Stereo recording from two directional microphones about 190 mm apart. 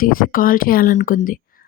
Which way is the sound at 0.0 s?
50° left (ahead or behind).